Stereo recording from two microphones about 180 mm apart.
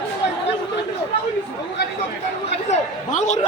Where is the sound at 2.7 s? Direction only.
40° left (ahead or behind).